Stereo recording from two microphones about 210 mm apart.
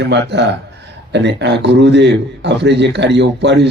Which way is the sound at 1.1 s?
55° right (ahead or behind).